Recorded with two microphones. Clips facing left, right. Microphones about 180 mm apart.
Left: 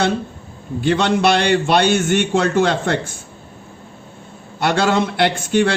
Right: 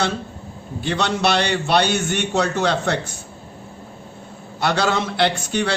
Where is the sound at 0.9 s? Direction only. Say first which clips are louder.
Left 5 dB; 50° left (ahead or behind).